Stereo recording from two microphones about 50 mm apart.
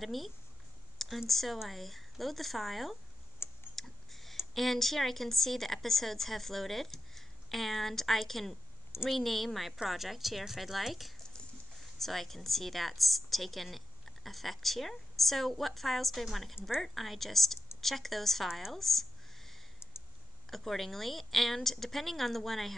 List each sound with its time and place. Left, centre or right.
0.0 s a woman's voice: centre
3.4 s tick: left
3.7 s tick: centre
4.6 s a woman's voice: centre
18.7 s a sound: centre
19.8 s clicking: left
20.4 s a woman's voice: centre